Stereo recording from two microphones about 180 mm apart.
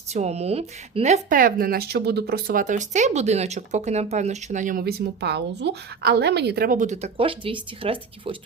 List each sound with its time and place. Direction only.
0.1 s speech: 35° right (ahead or behind)